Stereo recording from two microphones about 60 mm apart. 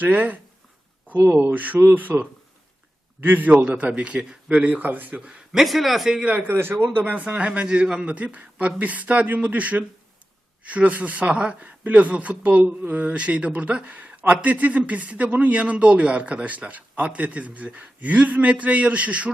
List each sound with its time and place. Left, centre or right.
0.0 s speech: right
1.4 s speech: right
5.5 s speech: centre
6.1 s speech: right
6.4 s speech: right